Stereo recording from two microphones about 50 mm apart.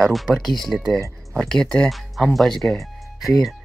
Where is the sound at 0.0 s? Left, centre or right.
Centre.